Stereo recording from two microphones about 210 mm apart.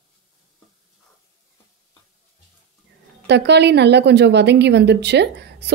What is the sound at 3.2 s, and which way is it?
A woman's voice, 55° right (ahead or behind).